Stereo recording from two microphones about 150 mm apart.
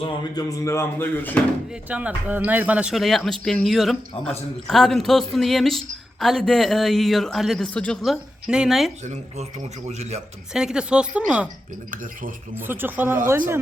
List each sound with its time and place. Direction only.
0.3 s speech: 20° left (ahead or behind)
1.9 s speech: 10° right (ahead or behind)
9.0 s a man's voice: 45° right (ahead or behind)
10.5 s speech: 5° right (ahead or behind)
12.5 s speech: 15° right (ahead or behind)